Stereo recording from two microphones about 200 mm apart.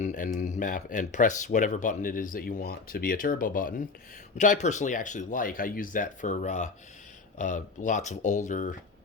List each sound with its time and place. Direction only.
0.0 s speech: 40° left (ahead or behind)